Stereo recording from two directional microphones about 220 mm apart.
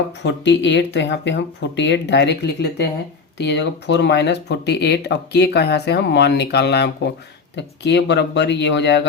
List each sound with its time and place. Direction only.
0.2 s speech: 55° left (ahead or behind)